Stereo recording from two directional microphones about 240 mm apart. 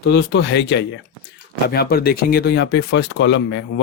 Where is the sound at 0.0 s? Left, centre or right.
Left.